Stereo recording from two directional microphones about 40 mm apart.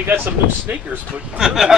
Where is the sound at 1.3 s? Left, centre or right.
Centre.